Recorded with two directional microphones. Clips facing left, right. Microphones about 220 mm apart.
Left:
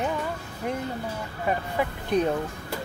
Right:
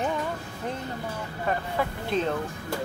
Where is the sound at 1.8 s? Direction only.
15° left (ahead or behind).